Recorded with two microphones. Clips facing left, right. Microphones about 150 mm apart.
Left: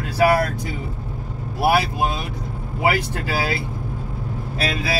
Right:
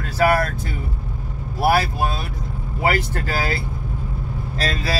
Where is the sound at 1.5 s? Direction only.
15° left (ahead or behind).